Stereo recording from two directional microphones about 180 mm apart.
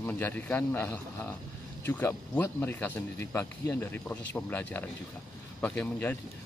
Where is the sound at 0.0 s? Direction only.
10° left (ahead or behind).